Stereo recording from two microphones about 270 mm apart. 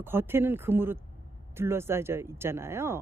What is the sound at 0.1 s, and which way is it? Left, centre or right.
Speech, centre.